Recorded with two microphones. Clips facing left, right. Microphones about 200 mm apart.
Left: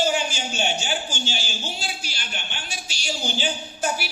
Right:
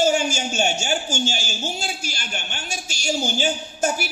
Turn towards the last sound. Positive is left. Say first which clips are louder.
# right 3 dB
turn(degrees=-45)  # may be behind; listen again after turning